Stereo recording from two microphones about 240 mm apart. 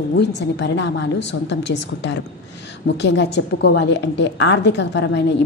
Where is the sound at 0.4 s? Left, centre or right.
Left.